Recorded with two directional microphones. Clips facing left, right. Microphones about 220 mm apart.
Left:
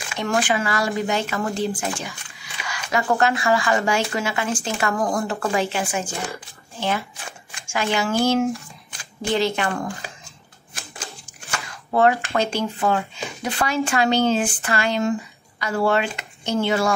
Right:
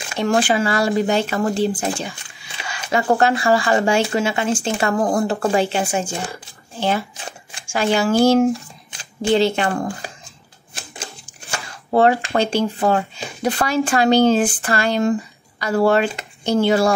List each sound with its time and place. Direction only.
0.1 s speech: 30° right (ahead or behind)
10.7 s typewriter: 30° right (ahead or behind)
11.5 s speech: 30° right (ahead or behind)